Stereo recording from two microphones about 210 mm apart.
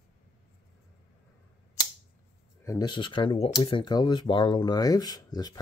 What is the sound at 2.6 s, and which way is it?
Speech, 20° left (ahead or behind).